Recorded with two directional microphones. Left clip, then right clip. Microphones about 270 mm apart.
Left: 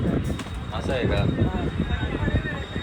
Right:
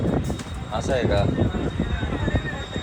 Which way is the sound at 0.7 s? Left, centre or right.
Centre.